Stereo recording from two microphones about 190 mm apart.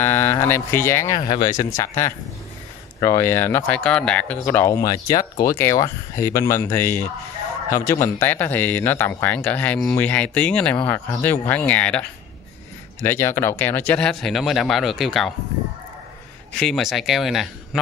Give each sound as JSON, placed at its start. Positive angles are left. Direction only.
{"t": 0.0, "sound": "speech", "side_deg": 15}
{"t": 16.5, "sound": "speech", "side_deg": 0}